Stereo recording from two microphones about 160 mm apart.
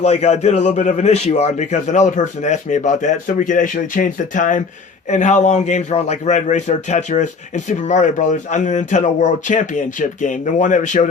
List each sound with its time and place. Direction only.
0.0 s a man's voice: 45° left (ahead or behind)